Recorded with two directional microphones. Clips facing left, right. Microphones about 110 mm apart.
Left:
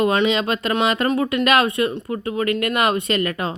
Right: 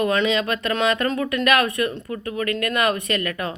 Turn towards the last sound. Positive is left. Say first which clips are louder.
# left 3 dB
turn(degrees=25)  # may be behind; listen again after turning